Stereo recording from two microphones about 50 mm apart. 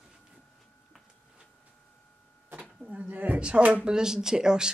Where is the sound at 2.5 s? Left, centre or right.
Right.